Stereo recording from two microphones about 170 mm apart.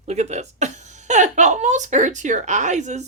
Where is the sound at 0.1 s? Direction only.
40° right (ahead or behind).